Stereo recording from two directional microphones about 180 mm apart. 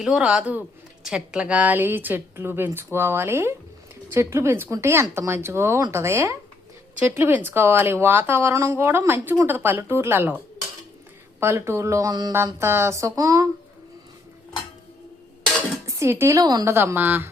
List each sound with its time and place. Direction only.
0.0 s speech: 5° right (ahead or behind)
15.9 s speech: 15° right (ahead or behind)